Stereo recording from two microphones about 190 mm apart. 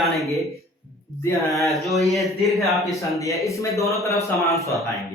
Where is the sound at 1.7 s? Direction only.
Centre (ahead or behind).